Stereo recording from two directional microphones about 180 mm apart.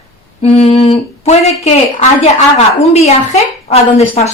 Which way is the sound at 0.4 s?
35° left (ahead or behind).